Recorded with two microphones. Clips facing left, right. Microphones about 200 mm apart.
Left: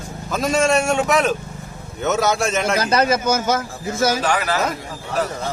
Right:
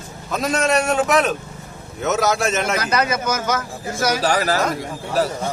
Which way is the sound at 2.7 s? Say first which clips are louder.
Left 3 dB; 30° left (ahead or behind).